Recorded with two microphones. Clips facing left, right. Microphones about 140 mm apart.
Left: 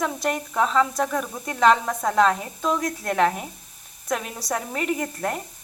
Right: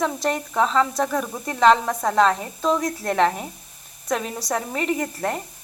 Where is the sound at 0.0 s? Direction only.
Centre (ahead or behind).